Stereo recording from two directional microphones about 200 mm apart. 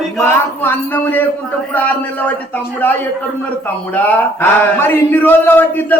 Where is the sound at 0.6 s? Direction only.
10° left (ahead or behind).